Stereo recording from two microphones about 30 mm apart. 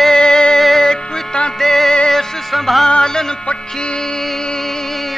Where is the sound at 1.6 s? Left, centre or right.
Centre.